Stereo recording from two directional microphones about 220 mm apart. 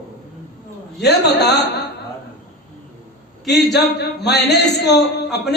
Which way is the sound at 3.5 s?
50° left (ahead or behind).